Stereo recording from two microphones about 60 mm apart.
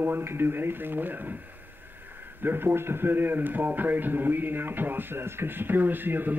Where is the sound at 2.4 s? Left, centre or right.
Right.